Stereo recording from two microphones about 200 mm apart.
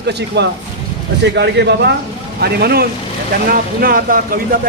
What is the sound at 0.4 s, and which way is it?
Speech, 60° right (ahead or behind).